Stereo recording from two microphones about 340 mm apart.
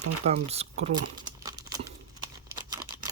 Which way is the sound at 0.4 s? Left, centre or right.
Centre.